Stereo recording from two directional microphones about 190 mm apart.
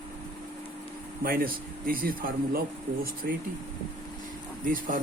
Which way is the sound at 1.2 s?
50° right (ahead or behind).